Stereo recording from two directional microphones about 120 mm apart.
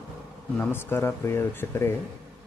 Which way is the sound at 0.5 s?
15° left (ahead or behind).